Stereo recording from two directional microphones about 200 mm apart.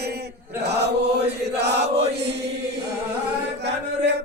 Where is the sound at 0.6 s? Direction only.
55° right (ahead or behind).